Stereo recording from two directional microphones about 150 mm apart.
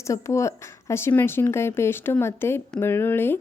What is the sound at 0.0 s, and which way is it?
Speech, 20° left (ahead or behind).